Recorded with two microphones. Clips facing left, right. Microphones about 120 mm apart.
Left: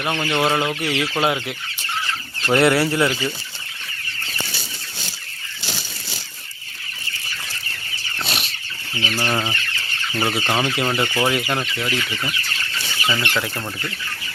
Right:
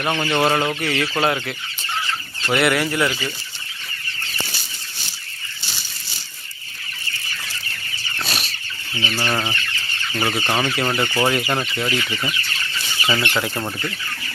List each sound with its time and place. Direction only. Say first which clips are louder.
0.0 s speech: right 1 dB; centre (ahead or behind)
2.5 s speech: left 3 dB; 30° left (ahead or behind)
8.2 s chicken: even; 20° left (ahead or behind)
9.0 s speech: even; 15° left (ahead or behind); by 13.7 s 15° right (ahead or behind)